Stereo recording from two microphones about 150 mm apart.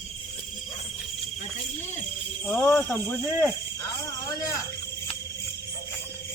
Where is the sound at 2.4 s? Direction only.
10° left (ahead or behind).